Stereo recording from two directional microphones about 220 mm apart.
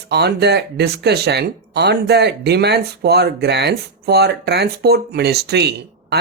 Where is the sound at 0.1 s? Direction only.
50° right (ahead or behind).